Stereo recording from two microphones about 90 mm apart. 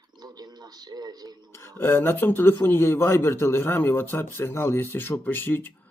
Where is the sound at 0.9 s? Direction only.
50° right (ahead or behind).